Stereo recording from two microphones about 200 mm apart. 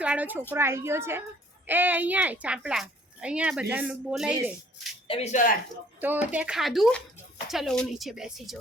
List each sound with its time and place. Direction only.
0.0 s a woman's voice: 5° right (ahead or behind)
5.0 s speech: 30° left (ahead or behind)
6.0 s a woman's voice: 10° right (ahead or behind)